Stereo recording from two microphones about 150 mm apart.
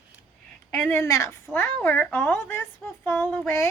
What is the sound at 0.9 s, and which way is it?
A woman's voice, 20° left (ahead or behind).